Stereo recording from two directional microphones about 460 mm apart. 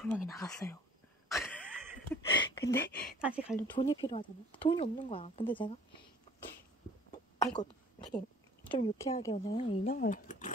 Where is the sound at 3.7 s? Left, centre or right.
Centre.